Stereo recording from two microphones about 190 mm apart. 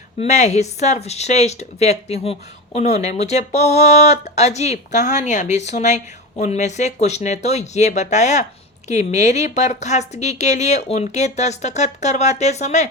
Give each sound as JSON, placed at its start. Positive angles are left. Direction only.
{"t": 0.2, "sound": "speech", "side_deg": 35}